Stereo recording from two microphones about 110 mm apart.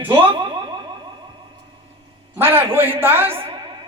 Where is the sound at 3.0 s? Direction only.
20° right (ahead or behind).